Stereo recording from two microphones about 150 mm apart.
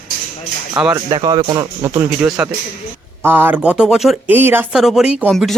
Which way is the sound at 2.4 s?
10° right (ahead or behind).